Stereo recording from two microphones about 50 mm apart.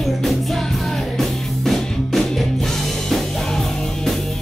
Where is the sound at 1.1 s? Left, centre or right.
Centre.